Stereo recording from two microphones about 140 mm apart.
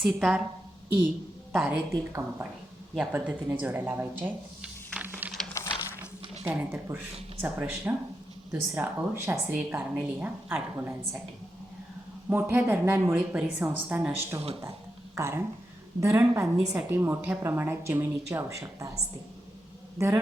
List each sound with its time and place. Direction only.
0.0 s a woman's voice: 5° right (ahead or behind)
1.5 s a woman's voice: 5° right (ahead or behind)
1.9 s a woman's voice: 20° right (ahead or behind)
5.6 s a sound: 20° left (ahead or behind)
6.4 s a woman's voice: 15° right (ahead or behind)
12.3 s a woman's voice: 15° right (ahead or behind)